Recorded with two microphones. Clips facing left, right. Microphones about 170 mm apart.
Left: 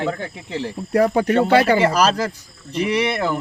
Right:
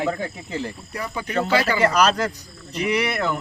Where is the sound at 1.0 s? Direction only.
65° left (ahead or behind).